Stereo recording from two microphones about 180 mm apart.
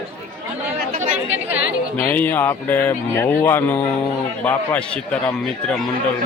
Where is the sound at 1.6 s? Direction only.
50° left (ahead or behind).